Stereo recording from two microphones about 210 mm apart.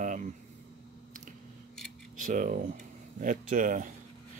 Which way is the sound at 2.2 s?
40° right (ahead or behind).